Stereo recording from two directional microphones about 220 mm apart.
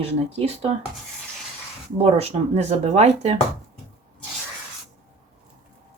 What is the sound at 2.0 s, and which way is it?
Speech, 30° right (ahead or behind).